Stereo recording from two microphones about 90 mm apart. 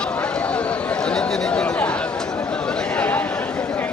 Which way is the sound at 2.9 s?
20° left (ahead or behind).